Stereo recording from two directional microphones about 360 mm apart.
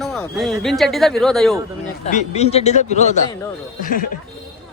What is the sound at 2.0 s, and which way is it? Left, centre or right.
Speech, centre.